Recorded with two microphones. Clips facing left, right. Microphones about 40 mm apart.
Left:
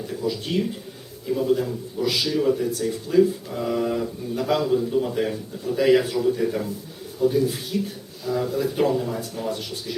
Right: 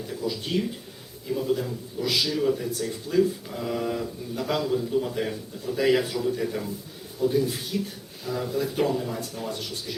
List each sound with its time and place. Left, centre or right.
0.1 s a man's voice: centre